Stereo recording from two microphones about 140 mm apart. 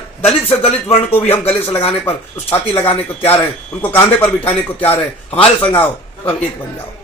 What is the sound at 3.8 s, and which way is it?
Speech, 15° left (ahead or behind).